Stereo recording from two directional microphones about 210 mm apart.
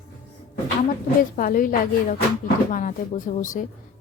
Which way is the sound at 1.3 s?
40° left (ahead or behind).